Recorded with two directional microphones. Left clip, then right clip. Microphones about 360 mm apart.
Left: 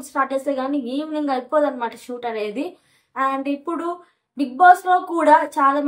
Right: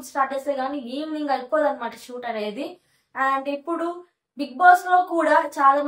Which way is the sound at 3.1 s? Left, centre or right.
Centre.